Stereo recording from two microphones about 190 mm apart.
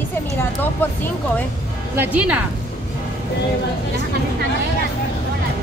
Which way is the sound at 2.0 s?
10° right (ahead or behind).